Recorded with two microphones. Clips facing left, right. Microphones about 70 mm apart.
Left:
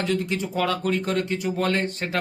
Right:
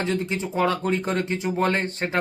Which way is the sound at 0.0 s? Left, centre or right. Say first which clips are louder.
Even; right.